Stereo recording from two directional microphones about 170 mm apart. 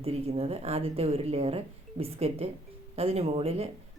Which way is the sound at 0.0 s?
35° right (ahead or behind).